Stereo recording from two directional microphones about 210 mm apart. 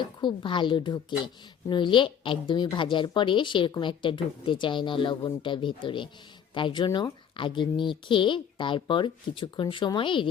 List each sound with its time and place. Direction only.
0.0 s a woman's voice: 20° left (ahead or behind)